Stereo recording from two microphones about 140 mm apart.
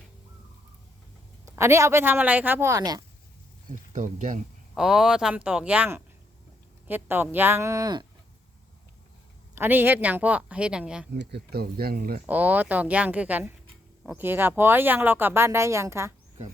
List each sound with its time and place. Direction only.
1.5 s speech: 20° right (ahead or behind)
3.7 s speech: 65° right (ahead or behind)
4.7 s speech: 5° right (ahead or behind); by 8.0 s 25° right (ahead or behind)
9.6 s speech: 15° right (ahead or behind)
11.5 s speech: 90° right
12.2 s speech: 10° right (ahead or behind)